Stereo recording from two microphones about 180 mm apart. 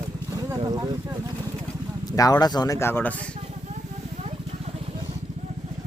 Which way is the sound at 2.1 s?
20° left (ahead or behind).